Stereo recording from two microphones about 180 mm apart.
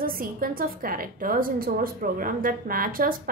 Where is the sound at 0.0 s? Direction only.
55° right (ahead or behind).